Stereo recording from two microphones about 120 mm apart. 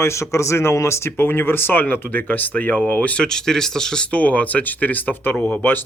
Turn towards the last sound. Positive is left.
turn(degrees=15)  # may be behind; listen again after turning